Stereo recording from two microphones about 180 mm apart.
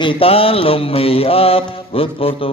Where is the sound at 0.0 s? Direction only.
30° left (ahead or behind).